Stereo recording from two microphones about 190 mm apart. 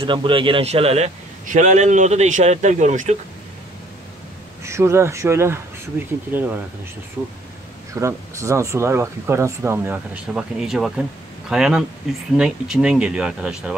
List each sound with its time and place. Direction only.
0.0 s a man's voice: 25° right (ahead or behind)
4.6 s speech: 15° right (ahead or behind)
7.9 s speech: 15° right (ahead or behind)